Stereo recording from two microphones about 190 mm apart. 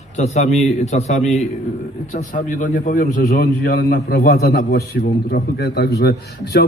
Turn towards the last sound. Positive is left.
turn(degrees=55)  # may be behind; listen again after turning